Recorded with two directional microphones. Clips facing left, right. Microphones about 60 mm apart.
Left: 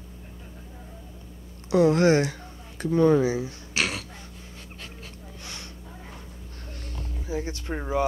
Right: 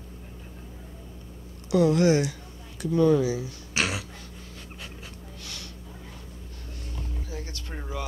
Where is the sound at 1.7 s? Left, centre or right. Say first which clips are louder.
Left 2 dB; left.